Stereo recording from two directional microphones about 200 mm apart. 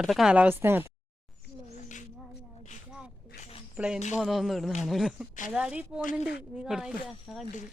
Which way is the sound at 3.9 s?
35° left (ahead or behind).